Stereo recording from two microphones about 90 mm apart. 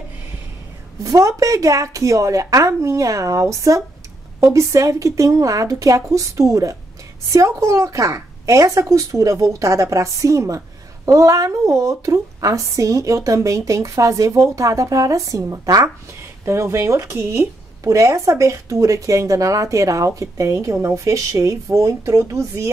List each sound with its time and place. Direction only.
1.0 s a woman's voice: 35° right (ahead or behind)